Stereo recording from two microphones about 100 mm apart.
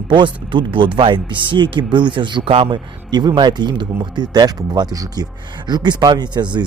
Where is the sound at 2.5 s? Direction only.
65° right (ahead or behind).